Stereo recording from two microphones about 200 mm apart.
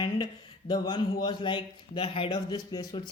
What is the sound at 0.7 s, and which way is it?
Speech, 20° left (ahead or behind).